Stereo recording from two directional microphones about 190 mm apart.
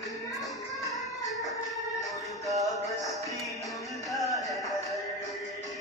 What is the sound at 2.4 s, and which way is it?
Music, centre (ahead or behind).